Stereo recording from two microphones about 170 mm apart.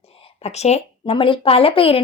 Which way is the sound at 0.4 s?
40° left (ahead or behind).